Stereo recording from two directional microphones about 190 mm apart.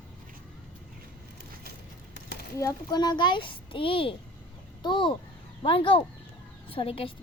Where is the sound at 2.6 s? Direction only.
20° left (ahead or behind).